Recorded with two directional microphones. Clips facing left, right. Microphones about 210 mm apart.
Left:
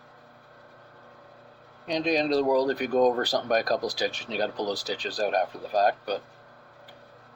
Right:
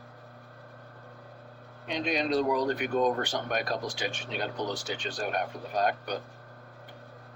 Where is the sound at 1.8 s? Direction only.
40° left (ahead or behind).